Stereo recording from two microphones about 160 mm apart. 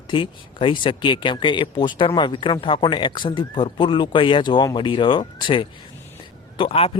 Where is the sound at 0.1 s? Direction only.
30° left (ahead or behind).